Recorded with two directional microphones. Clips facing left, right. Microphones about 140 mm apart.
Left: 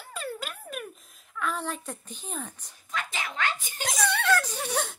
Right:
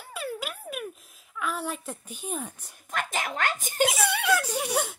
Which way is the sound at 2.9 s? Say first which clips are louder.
Right 3 dB; 50° right (ahead or behind).